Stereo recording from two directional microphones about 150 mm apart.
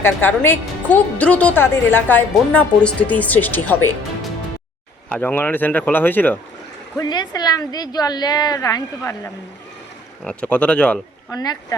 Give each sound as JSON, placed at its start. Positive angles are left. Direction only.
{"t": 0.0, "sound": "a woman's voice", "side_deg": 15}
{"t": 5.1, "sound": "a woman's voice", "side_deg": 15}
{"t": 6.9, "sound": "a woman's voice", "side_deg": 25}
{"t": 10.2, "sound": "a woman's voice", "side_deg": 10}
{"t": 11.3, "sound": "a woman's voice", "side_deg": 25}